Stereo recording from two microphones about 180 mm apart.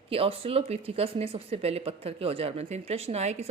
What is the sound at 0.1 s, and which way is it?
Speech, 30° right (ahead or behind).